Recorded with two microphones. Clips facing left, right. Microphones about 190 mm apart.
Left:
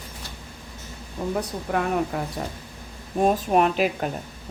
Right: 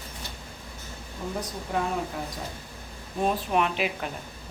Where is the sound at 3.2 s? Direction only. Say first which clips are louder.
Left 5 dB; 45° left (ahead or behind).